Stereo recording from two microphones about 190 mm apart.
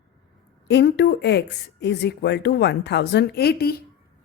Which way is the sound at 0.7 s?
60° left (ahead or behind).